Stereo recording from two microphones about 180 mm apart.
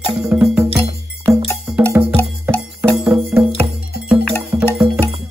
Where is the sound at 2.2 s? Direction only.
10° left (ahead or behind).